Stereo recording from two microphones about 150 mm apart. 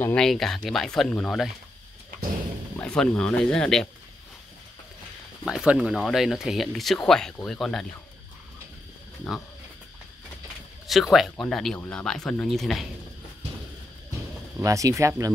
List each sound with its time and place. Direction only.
0.0 s speech: 5° left (ahead or behind)
2.8 s speech: 10° left (ahead or behind)
5.4 s speech: 5° right (ahead or behind)
10.9 s speech: centre (ahead or behind)
14.6 s speech: 20° right (ahead or behind)